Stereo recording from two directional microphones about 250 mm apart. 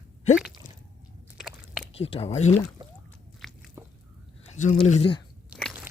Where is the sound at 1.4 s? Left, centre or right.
Centre.